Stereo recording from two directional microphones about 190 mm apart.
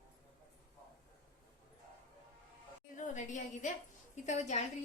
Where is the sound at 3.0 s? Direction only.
40° left (ahead or behind).